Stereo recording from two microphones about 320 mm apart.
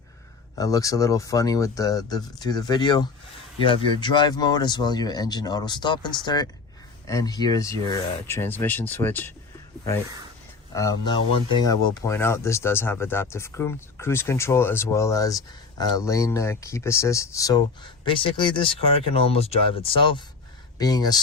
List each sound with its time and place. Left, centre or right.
0.6 s speech: centre
10.8 s speech: centre